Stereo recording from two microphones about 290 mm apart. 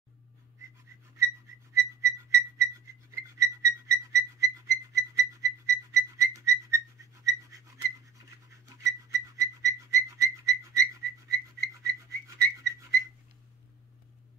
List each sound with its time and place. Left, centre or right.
1.8 s whistle: centre